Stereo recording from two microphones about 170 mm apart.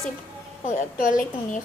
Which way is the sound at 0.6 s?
50° left (ahead or behind).